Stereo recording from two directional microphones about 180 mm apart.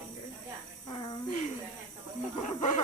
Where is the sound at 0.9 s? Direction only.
25° left (ahead or behind).